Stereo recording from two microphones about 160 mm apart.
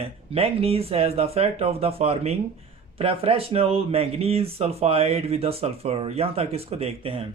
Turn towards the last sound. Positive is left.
turn(degrees=-35)  # may be behind; listen again after turning